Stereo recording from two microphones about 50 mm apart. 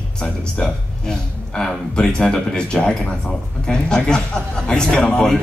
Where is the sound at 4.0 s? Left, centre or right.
Centre.